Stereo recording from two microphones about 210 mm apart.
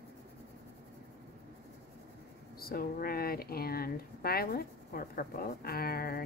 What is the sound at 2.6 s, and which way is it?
Speech, 45° left (ahead or behind).